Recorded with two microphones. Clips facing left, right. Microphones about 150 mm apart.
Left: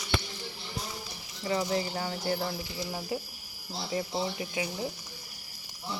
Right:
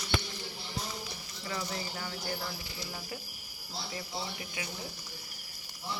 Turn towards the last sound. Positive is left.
turn(degrees=25)  # may be behind; listen again after turning